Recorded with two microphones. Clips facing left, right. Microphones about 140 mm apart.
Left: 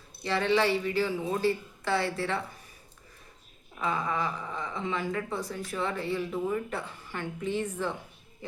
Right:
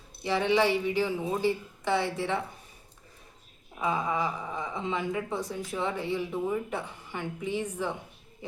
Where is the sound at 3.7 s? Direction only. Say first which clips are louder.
Right 1 dB; 15° right (ahead or behind).